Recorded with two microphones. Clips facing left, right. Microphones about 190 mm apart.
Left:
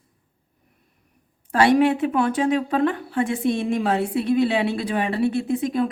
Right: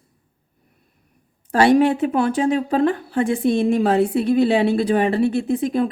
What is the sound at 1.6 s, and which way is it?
A woman's voice, 35° right (ahead or behind).